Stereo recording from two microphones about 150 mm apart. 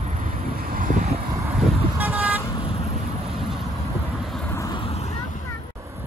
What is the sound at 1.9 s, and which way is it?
Vehicle, 10° right (ahead or behind).